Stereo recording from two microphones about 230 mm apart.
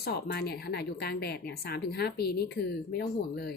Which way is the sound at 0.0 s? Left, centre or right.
Left.